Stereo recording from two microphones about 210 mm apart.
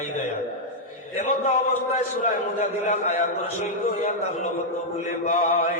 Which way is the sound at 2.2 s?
35° left (ahead or behind).